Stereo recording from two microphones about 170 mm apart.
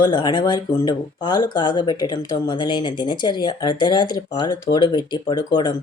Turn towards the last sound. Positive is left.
turn(degrees=25)  # may be behind; listen again after turning